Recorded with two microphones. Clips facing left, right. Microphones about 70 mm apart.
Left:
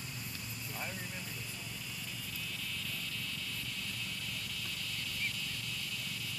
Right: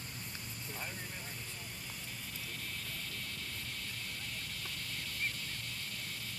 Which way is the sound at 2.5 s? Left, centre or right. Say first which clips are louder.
Left 2 dB; right.